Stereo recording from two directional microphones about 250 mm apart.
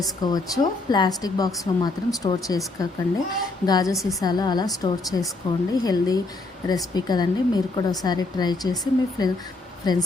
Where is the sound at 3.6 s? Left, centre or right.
Centre.